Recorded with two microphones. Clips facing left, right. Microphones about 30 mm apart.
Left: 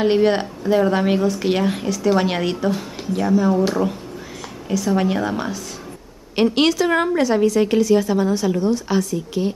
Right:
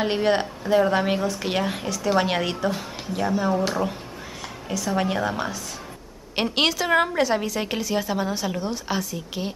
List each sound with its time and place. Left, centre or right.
0.0 s a woman's voice: centre